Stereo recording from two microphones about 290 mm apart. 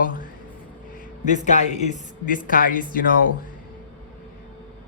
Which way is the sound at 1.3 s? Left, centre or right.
Left.